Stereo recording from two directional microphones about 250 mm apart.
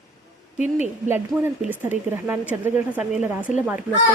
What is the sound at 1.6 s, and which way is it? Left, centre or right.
Speech, centre.